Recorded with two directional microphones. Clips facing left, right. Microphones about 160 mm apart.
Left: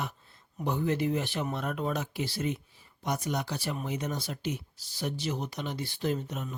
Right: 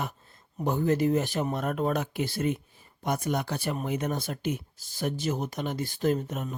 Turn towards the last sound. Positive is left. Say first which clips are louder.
# right 5 dB
turn(degrees=-45)  # may be behind; listen again after turning